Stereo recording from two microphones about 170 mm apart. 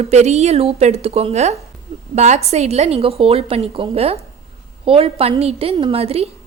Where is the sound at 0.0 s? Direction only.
40° right (ahead or behind).